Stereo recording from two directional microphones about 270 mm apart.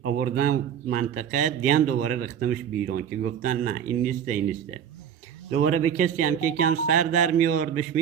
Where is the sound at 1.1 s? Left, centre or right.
Right.